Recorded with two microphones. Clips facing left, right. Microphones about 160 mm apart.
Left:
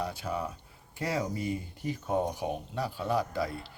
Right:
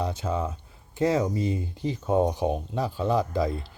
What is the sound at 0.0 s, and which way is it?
Speech, 20° right (ahead or behind).